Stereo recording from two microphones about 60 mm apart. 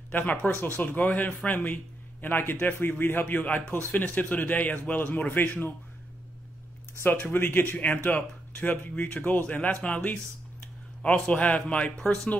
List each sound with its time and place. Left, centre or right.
0.1 s speech: left
7.0 s a man's voice: left; by 12.2 s centre